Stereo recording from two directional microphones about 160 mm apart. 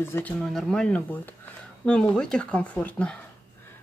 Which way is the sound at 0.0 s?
10° left (ahead or behind).